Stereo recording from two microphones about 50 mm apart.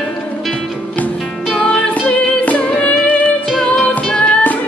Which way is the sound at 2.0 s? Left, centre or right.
Left.